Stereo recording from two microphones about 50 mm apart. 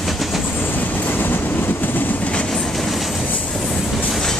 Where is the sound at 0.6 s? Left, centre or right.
Left.